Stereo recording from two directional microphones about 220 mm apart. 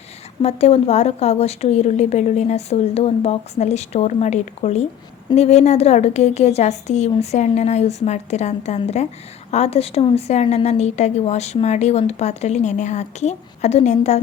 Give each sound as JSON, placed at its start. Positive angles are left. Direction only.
{"t": 0.4, "sound": "a woman's voice", "side_deg": 30}